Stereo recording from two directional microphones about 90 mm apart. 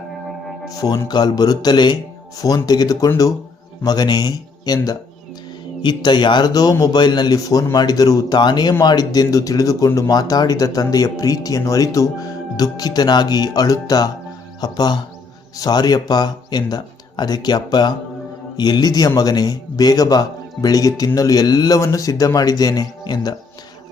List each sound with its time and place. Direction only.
0.3 s music: centre (ahead or behind)
0.7 s speech: 40° left (ahead or behind)
5.8 s speech: 55° left (ahead or behind)